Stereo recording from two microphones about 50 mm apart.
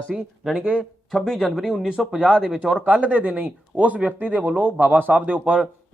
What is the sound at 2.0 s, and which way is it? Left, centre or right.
Speech, centre.